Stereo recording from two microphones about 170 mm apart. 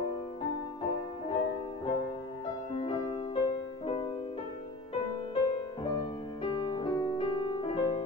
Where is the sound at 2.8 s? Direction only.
30° left (ahead or behind).